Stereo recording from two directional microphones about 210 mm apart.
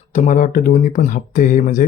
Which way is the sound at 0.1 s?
35° left (ahead or behind).